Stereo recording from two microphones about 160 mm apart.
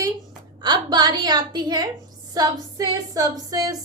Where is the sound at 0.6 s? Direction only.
30° right (ahead or behind).